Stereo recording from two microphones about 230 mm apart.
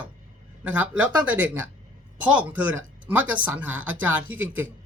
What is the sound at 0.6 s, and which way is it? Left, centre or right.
Speech, centre.